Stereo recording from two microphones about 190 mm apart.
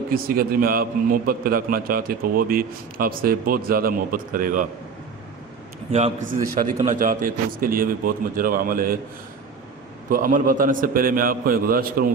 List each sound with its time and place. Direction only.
0.1 s a man's voice: 50° right (ahead or behind)
5.9 s a man's voice: 40° right (ahead or behind)
10.1 s a man's voice: 45° right (ahead or behind)